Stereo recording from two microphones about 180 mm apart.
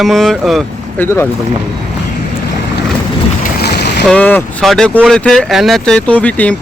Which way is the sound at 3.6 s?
65° left (ahead or behind).